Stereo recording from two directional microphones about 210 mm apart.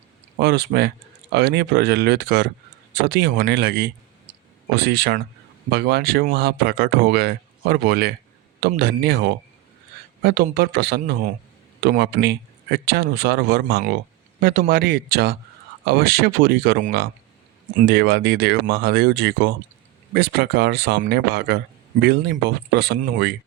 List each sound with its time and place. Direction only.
0.3 s speech: 50° right (ahead or behind)